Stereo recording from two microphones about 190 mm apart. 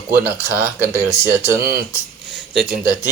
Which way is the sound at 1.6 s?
55° right (ahead or behind).